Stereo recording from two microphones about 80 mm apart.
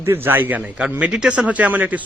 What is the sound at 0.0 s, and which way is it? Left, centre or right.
Speech, right.